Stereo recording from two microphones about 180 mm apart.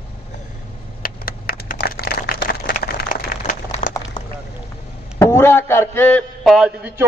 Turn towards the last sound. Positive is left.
turn(degrees=-10)  # may be behind; listen again after turning